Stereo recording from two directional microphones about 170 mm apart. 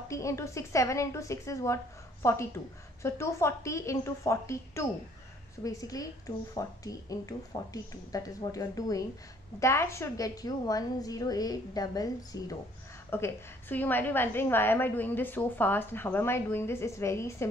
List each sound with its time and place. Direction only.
0.1 s a woman's voice: 15° left (ahead or behind)